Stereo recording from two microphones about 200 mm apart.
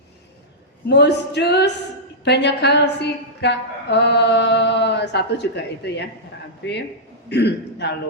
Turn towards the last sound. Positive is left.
turn(degrees=55)  # may be behind; listen again after turning